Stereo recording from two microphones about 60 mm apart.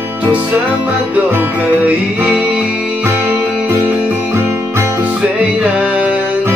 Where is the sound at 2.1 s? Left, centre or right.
Right.